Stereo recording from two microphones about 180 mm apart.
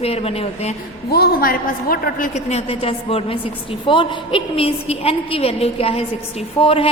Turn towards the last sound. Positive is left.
turn(degrees=30)  # may be behind; listen again after turning